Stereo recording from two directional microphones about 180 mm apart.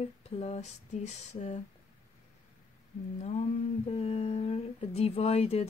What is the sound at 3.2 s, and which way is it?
A woman's voice, 40° left (ahead or behind).